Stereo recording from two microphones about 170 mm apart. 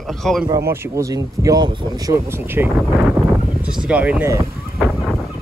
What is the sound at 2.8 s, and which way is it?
Speech, centre (ahead or behind).